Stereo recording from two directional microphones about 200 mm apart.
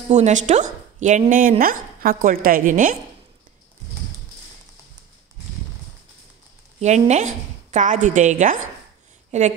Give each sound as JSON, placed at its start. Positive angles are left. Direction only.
{"t": 0.1, "sound": "speech", "side_deg": -35}
{"t": 7.1, "sound": "speech", "side_deg": -35}